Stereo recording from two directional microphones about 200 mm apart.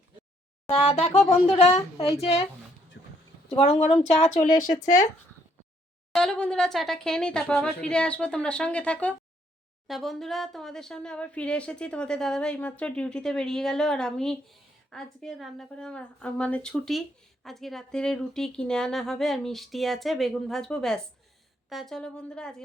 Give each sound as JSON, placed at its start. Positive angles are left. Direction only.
{"t": 0.7, "sound": "a woman's voice", "side_deg": 30}
{"t": 3.0, "sound": "a sound", "side_deg": 60}
{"t": 3.5, "sound": "a woman's voice", "side_deg": 30}
{"t": 4.4, "sound": "speech", "side_deg": 20}
{"t": 6.1, "sound": "speech", "side_deg": 5}